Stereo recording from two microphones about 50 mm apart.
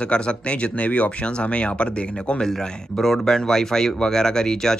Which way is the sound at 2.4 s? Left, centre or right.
Centre.